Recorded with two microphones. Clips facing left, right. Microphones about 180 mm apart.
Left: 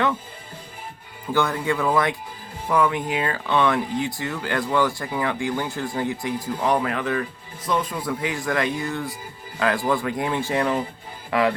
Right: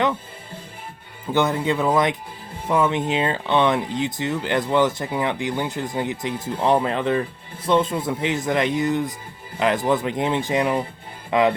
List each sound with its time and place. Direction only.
1.3 s speech: 20° right (ahead or behind)